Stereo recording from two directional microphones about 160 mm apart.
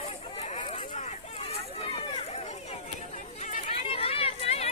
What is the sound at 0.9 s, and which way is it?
Run, 45° left (ahead or behind).